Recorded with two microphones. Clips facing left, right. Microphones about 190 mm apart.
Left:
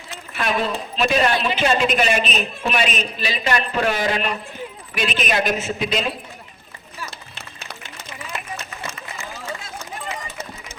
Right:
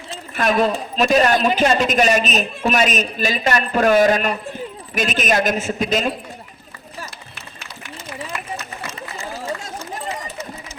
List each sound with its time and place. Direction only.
0.3 s a man's voice: 45° right (ahead or behind)
8.3 s run: 25° left (ahead or behind)
9.6 s run: 40° right (ahead or behind)